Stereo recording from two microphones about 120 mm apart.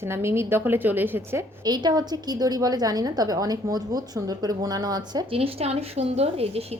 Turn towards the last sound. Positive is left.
turn(degrees=-55)  # may be behind; listen again after turning